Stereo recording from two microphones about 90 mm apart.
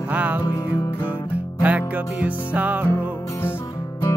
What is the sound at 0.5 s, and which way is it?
Music, 50° left (ahead or behind).